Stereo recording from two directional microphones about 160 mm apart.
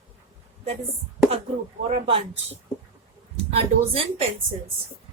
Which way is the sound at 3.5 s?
35° right (ahead or behind).